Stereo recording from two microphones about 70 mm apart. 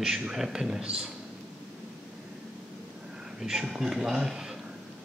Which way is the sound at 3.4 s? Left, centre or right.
Centre.